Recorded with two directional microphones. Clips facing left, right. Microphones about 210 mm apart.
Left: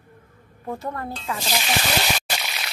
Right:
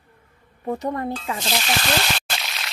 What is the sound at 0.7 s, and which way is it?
Speech, 15° right (ahead or behind).